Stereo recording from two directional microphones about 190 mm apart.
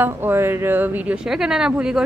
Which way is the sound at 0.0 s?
10° right (ahead or behind).